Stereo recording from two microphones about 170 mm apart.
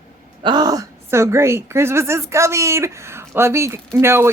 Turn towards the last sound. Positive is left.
turn(degrees=-15)  # may be behind; listen again after turning